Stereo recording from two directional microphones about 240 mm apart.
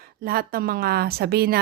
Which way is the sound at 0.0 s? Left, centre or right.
Right.